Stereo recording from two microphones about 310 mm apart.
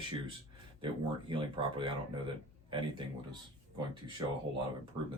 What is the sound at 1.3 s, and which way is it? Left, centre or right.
Speech, centre.